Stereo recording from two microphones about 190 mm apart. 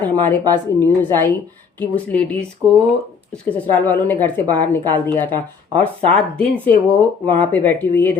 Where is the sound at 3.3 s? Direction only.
5° left (ahead or behind).